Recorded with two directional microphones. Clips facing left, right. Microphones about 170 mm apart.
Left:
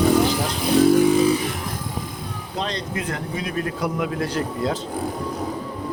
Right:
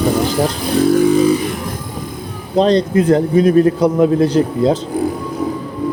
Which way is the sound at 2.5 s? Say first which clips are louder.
Right 16 dB; 35° right (ahead or behind).